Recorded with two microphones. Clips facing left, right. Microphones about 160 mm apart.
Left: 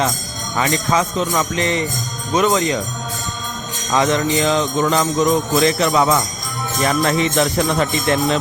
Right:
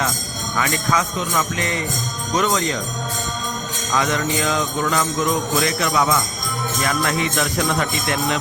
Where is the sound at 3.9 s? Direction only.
25° left (ahead or behind).